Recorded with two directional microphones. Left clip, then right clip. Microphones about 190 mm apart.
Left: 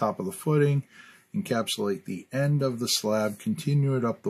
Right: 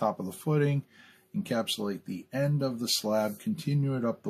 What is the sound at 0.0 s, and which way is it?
Speech, 50° left (ahead or behind).